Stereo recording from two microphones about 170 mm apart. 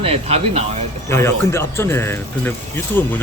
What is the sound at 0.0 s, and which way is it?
Speech, 35° right (ahead or behind).